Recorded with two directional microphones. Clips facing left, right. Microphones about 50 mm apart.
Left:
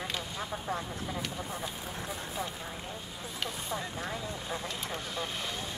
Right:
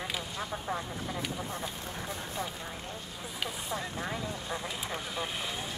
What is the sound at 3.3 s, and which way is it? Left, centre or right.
Vehicle, centre.